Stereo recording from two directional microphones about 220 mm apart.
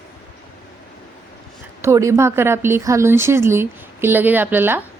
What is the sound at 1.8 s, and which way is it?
A woman's voice, 15° right (ahead or behind).